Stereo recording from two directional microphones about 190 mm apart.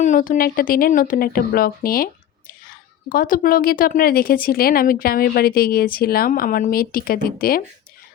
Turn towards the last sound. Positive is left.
turn(degrees=50)  # may be behind; listen again after turning